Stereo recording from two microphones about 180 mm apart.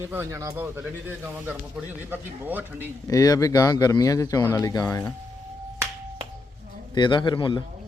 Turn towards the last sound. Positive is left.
turn(degrees=25)  # may be behind; listen again after turning